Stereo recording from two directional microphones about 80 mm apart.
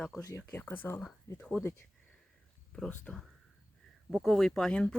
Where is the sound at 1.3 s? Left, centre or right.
Centre.